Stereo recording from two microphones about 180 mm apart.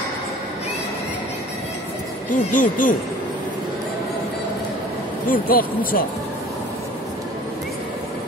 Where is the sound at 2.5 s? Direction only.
45° left (ahead or behind).